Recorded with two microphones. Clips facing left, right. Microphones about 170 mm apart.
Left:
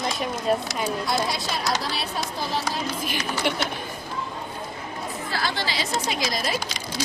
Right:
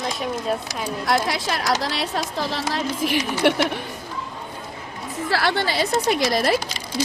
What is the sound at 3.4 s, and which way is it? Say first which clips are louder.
Speech: right 8 dB; 65° right (ahead or behind).